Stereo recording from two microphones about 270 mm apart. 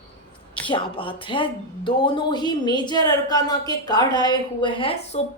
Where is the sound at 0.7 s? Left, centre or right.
Centre.